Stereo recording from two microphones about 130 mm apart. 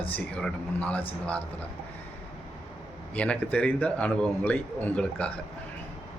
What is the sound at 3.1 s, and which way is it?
A man's voice, 10° left (ahead or behind).